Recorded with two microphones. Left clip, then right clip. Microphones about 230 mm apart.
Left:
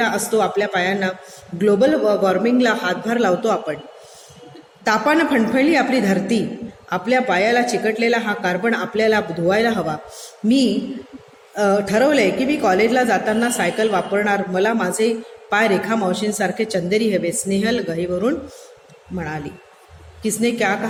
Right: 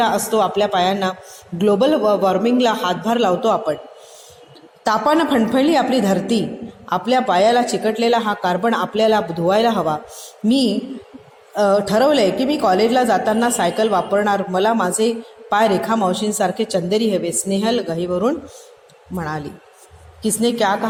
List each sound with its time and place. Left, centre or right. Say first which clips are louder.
0.0 s a woman's voice: right 2 dB; centre
4.8 s a woman's voice: right 1 dB; centre
11.5 s a woman's voice: right 2 dB; centre